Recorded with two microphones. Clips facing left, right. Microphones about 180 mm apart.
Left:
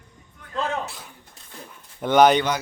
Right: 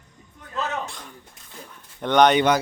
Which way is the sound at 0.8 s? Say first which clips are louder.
Even; 5° left (ahead or behind).